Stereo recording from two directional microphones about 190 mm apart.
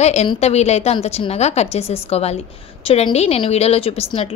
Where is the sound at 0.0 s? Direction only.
35° left (ahead or behind).